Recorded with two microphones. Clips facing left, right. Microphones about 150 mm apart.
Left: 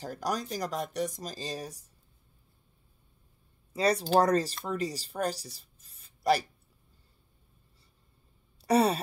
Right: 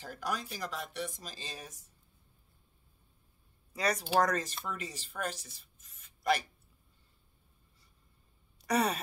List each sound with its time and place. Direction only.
0.0 s speech: 40° left (ahead or behind)
3.7 s speech: 30° left (ahead or behind)
8.5 s speech: 30° left (ahead or behind)